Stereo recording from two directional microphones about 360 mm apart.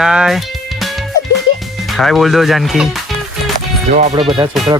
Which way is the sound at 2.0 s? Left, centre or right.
Centre.